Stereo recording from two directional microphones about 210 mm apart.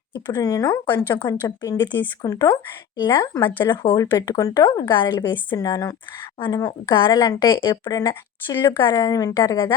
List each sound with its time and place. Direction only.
0.1 s a woman's voice: 20° left (ahead or behind)